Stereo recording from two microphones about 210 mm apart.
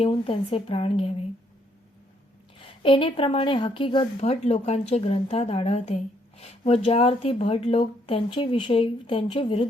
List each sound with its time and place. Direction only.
0.0 s a woman's voice: 25° left (ahead or behind)
2.6 s a woman's voice: 25° left (ahead or behind)